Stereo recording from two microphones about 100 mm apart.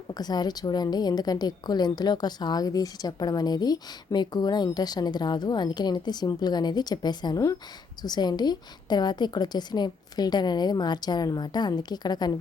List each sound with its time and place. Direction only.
0.1 s a woman's voice: 45° left (ahead or behind)